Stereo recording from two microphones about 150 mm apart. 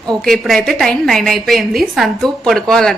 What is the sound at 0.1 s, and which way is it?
Speech, centre (ahead or behind).